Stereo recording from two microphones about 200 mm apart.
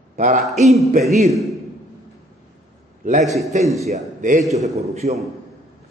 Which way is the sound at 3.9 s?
40° right (ahead or behind).